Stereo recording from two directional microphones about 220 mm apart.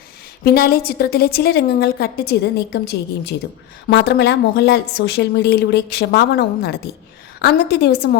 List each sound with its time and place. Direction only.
0.4 s a woman's voice: 45° left (ahead or behind)